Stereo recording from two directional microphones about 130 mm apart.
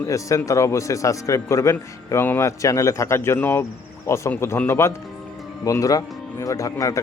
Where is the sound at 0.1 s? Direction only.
25° left (ahead or behind).